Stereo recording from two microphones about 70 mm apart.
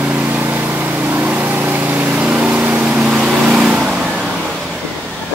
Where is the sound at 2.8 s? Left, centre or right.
Centre.